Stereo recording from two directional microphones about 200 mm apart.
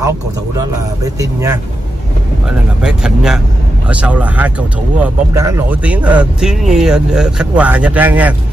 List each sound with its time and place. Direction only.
0.6 s speech: 15° right (ahead or behind)
2.8 s speech: 5° right (ahead or behind)